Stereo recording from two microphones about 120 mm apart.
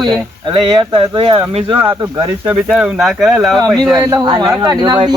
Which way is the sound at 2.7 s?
5° right (ahead or behind).